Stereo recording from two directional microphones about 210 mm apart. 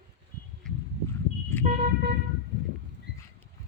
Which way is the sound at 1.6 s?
40° right (ahead or behind).